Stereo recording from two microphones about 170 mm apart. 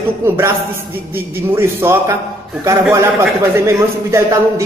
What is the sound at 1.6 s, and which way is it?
A man's voice, 15° right (ahead or behind).